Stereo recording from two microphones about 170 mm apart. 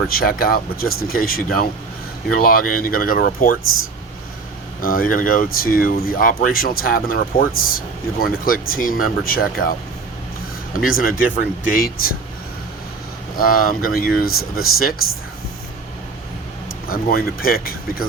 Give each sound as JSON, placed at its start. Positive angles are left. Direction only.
{"t": 0.2, "sound": "speech", "side_deg": 60}
{"t": 4.8, "sound": "speech", "side_deg": 55}
{"t": 10.8, "sound": "speech", "side_deg": 55}
{"t": 13.3, "sound": "speech", "side_deg": 60}
{"t": 16.9, "sound": "speech", "side_deg": 60}